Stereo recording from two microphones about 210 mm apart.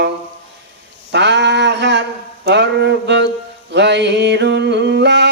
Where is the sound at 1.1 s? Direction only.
55° right (ahead or behind).